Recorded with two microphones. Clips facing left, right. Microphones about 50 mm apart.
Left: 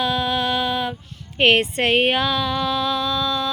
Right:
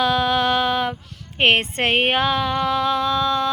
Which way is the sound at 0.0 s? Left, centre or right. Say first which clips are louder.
Right 3 dB; right.